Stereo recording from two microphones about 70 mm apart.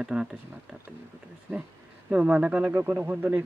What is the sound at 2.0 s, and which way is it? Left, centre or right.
Speech, centre.